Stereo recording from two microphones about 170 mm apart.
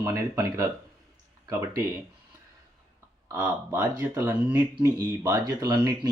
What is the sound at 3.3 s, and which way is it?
Speech, 20° right (ahead or behind).